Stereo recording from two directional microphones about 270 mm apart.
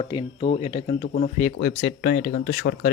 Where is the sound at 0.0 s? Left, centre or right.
Centre.